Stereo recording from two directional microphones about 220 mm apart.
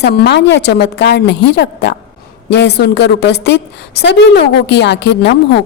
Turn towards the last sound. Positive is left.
turn(degrees=50)  # may be behind; listen again after turning